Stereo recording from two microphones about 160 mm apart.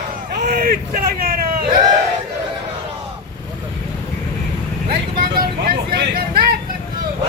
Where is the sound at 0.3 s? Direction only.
90° right; by 1.5 s 65° right (ahead or behind).